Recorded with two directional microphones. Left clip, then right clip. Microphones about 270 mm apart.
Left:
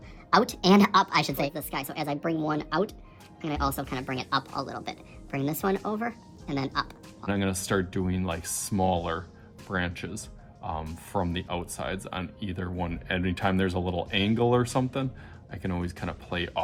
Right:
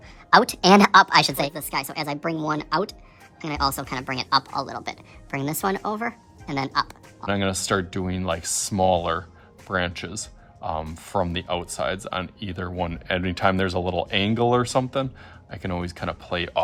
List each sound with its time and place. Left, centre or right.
0.3 s a woman's voice: centre